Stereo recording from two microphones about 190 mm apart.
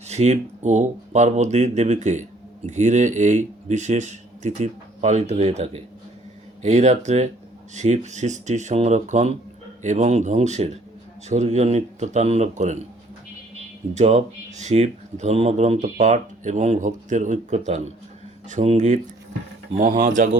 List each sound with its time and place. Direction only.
0.1 s speech: 35° right (ahead or behind)
13.9 s speech: 35° right (ahead or behind)